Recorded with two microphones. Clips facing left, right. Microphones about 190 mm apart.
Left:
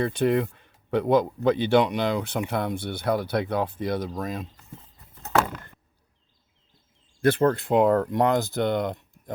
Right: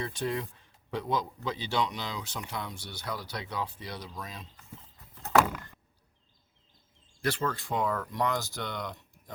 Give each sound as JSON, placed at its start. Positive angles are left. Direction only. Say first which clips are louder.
{"t": 0.0, "sound": "speech", "louder": "left 10 dB", "side_deg": 60}
{"t": 7.2, "sound": "speech", "louder": "left 11 dB", "side_deg": 55}